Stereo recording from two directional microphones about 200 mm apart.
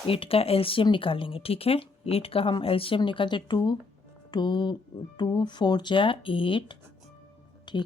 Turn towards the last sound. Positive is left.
turn(degrees=25)  # may be behind; listen again after turning